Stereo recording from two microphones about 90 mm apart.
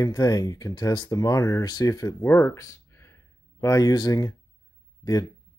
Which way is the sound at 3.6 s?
40° left (ahead or behind).